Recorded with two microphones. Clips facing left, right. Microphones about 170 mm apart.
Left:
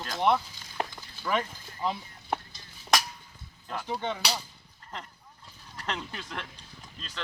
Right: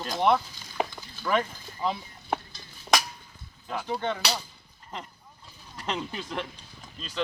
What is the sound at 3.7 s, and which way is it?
Speech, 10° right (ahead or behind).